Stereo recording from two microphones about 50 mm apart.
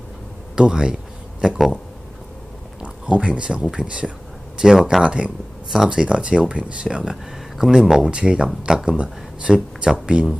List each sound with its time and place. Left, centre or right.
0.6 s speech: centre
2.8 s speech: right; by 5.0 s centre
5.0 s speech: centre
7.0 s speech: centre